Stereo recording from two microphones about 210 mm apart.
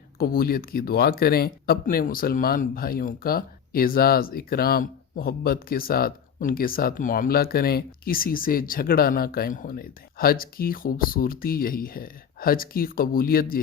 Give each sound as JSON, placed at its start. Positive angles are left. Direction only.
{"t": 0.2, "sound": "speech", "side_deg": 45}